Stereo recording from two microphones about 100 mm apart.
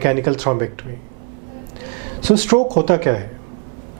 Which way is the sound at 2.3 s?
15° right (ahead or behind).